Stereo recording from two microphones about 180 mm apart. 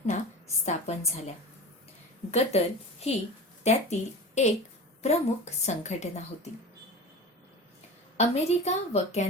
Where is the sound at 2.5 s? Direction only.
35° left (ahead or behind).